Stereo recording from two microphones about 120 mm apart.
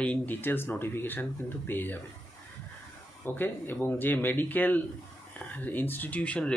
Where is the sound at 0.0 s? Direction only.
10° left (ahead or behind).